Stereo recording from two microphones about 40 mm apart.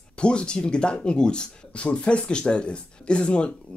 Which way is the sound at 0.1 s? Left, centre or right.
Left.